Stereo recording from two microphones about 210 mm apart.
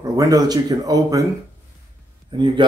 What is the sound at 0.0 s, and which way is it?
Speech, 15° right (ahead or behind).